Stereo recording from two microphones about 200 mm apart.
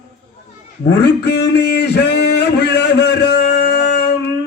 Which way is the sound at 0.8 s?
55° left (ahead or behind).